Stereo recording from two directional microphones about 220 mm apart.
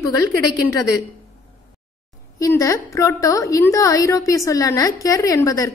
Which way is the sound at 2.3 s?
15° left (ahead or behind).